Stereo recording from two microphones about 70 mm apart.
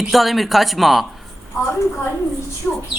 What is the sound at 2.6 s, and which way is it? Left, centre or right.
Speech, centre.